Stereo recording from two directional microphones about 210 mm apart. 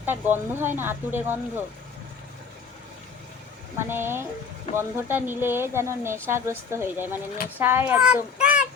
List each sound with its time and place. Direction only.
0.0 s speech: 10° right (ahead or behind)
3.8 s a child's voice: 10° right (ahead or behind)